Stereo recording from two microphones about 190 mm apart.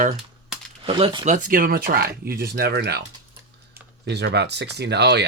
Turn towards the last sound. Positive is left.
turn(degrees=-60)  # may be behind; listen again after turning